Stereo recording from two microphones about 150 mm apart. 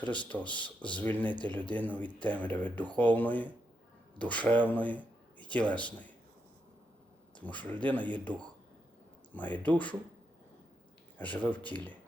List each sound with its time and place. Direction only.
0.0 s speech: 10° left (ahead or behind)
7.4 s speech: 10° left (ahead or behind)
9.3 s speech: 10° left (ahead or behind)
11.2 s speech: 10° left (ahead or behind)